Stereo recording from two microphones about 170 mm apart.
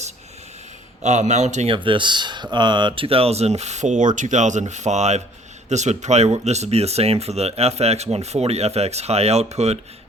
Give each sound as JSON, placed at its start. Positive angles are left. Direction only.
{"t": 1.0, "sound": "a man's voice", "side_deg": -45}
{"t": 1.7, "sound": "speech", "side_deg": -30}